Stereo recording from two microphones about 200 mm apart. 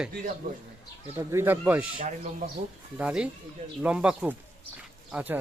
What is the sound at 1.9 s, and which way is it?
Speech, 30° right (ahead or behind).